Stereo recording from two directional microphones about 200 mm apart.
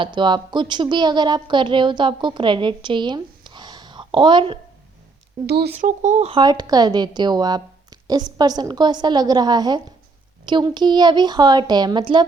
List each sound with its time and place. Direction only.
0.0 s a woman's voice: 25° right (ahead or behind)
5.5 s speech: 55° right (ahead or behind)
6.0 s a woman's voice: 35° right (ahead or behind)